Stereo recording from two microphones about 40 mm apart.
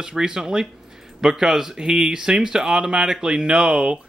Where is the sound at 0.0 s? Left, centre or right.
Centre.